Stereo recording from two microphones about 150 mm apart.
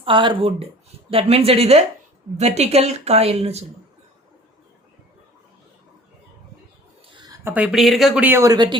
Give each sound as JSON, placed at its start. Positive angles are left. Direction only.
{"t": 0.0, "sound": "speech", "side_deg": -35}
{"t": 7.1, "sound": "a sound", "side_deg": -30}
{"t": 7.4, "sound": "speech", "side_deg": -10}